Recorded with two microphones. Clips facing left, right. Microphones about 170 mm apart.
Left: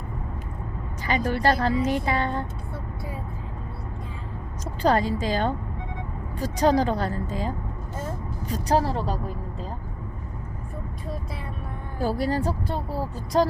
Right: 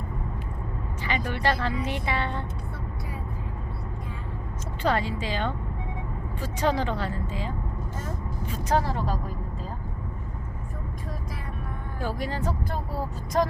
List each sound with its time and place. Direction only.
1.0 s a woman's voice: 40° left (ahead or behind)
4.8 s a woman's voice: 40° left (ahead or behind)
11.9 s a woman's voice: 35° left (ahead or behind)